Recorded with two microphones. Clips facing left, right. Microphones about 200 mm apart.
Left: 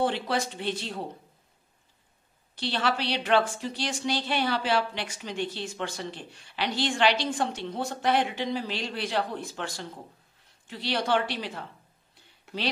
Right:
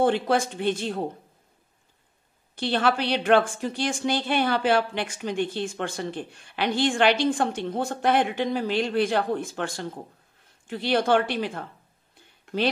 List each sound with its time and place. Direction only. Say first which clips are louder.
0.0 s a woman's voice: right 5 dB; 50° right (ahead or behind)
2.5 s a woman's voice: right 5 dB; 50° right (ahead or behind)
12.5 s speech: right 8 dB; 5° left (ahead or behind)